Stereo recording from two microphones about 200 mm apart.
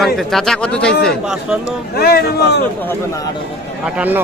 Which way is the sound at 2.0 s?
50° left (ahead or behind).